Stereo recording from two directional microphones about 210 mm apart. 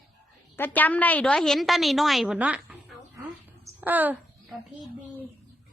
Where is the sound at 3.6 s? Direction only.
10° right (ahead or behind).